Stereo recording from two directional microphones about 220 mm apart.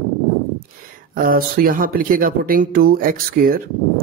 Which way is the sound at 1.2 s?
40° right (ahead or behind).